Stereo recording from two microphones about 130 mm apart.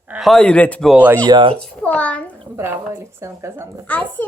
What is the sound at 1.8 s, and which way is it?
Speech, 10° left (ahead or behind).